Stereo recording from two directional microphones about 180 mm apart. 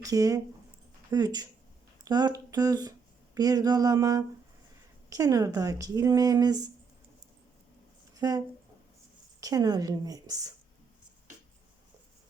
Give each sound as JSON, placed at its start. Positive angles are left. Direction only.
{"t": 0.0, "sound": "speech", "side_deg": -20}
{"t": 8.2, "sound": "speech", "side_deg": -20}